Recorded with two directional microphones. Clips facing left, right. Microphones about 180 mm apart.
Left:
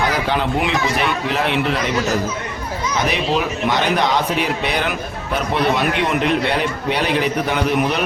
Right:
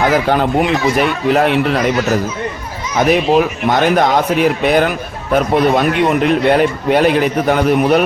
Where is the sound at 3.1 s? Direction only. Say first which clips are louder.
Right 8 dB; 50° right (ahead or behind).